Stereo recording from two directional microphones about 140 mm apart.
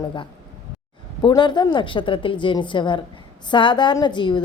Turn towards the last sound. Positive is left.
turn(degrees=35)  # may be behind; listen again after turning